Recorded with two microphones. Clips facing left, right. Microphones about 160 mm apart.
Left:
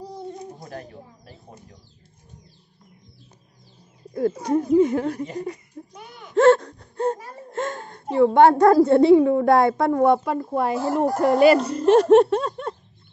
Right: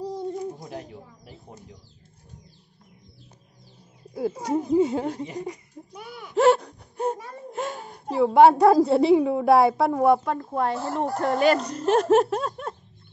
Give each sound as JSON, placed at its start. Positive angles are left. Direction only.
{"t": 0.7, "sound": "speech", "side_deg": -15}
{"t": 4.1, "sound": "speech", "side_deg": -10}
{"t": 5.9, "sound": "a sound", "side_deg": -5}
{"t": 6.3, "sound": "gasp", "side_deg": -15}
{"t": 7.5, "sound": "a woman's voice", "side_deg": -10}